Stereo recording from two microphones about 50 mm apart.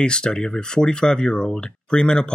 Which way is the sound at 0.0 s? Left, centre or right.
Centre.